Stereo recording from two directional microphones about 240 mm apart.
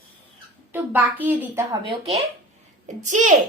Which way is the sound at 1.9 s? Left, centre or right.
Right.